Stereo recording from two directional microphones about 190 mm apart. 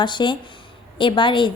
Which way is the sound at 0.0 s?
25° left (ahead or behind).